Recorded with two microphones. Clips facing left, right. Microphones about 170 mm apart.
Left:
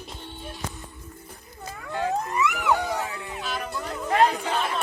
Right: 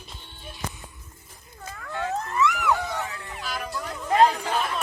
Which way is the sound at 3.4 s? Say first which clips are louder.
Even; 5° right (ahead or behind).